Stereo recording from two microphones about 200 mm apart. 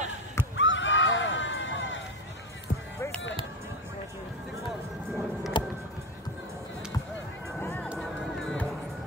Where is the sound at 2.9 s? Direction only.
15° left (ahead or behind).